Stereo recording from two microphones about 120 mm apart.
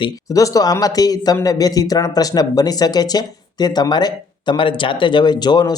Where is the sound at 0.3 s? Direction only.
30° left (ahead or behind).